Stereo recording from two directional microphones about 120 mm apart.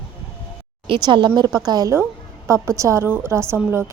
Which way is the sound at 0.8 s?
45° right (ahead or behind).